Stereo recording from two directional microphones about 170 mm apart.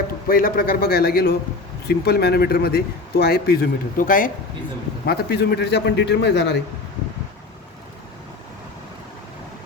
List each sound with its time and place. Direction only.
0.3 s a man's voice: 55° left (ahead or behind)
5.0 s speech: 70° left (ahead or behind)